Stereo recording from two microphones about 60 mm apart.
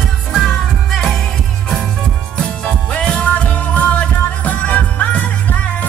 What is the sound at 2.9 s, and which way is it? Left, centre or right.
Music, left.